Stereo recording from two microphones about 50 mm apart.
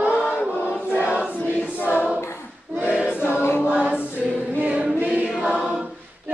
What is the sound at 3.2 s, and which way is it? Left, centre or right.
Choir, left.